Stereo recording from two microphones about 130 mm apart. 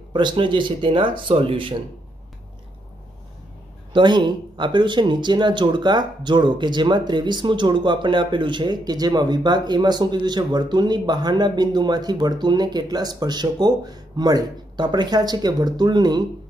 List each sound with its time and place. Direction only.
0.1 s speech: 35° right (ahead or behind)
3.9 s speech: 35° right (ahead or behind)